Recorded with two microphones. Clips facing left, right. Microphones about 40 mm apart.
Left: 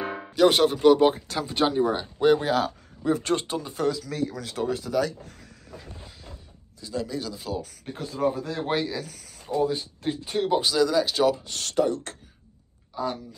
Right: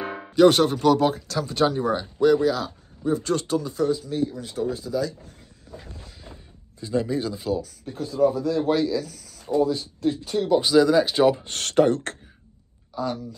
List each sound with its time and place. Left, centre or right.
0.0 s music: centre
0.8 s speech: centre
2.1 s speech: left
3.0 s speech: left
3.3 s speech: left
4.0 s speech: left
6.8 s speech: right
7.6 s speech: left
9.0 s a sound: left
9.6 s speech: left
10.6 s speech: centre
11.4 s speech: right
12.9 s speech: centre